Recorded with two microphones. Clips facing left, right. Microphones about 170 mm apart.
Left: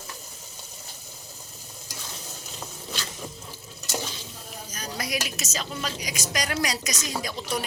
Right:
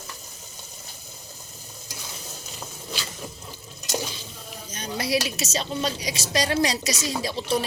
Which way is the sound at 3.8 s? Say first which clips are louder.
Right 3 dB; 15° right (ahead or behind).